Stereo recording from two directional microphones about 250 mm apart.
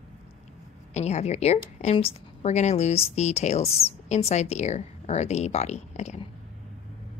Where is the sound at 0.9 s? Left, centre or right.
Left.